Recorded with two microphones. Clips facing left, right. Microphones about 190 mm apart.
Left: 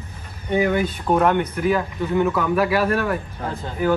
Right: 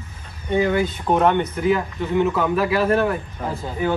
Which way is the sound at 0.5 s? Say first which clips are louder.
Even; 15° left (ahead or behind).